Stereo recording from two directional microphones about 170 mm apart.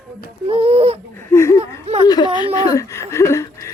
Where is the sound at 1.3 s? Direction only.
15° left (ahead or behind).